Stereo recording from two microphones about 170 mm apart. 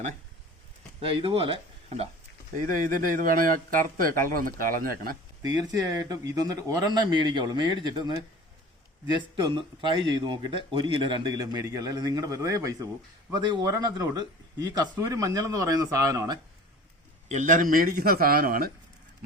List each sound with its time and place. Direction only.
1.0 s speech: 35° right (ahead or behind)
2.8 s speech: 55° right (ahead or behind)
5.4 s speech: 20° right (ahead or behind)
9.3 s speech: 30° right (ahead or behind)
17.2 s speech: 45° right (ahead or behind)